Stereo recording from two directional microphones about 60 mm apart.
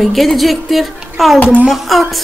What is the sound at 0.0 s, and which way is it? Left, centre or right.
A man's voice, centre.